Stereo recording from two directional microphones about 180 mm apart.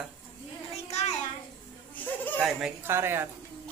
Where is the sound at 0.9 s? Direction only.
35° left (ahead or behind).